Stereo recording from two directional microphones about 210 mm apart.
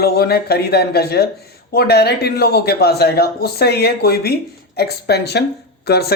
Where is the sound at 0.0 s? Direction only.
50° left (ahead or behind).